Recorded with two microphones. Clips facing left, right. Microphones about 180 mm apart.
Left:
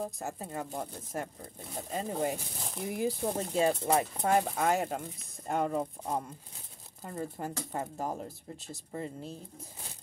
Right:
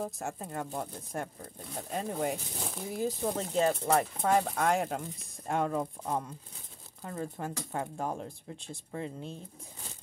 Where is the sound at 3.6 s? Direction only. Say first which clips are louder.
Even; 20° left (ahead or behind).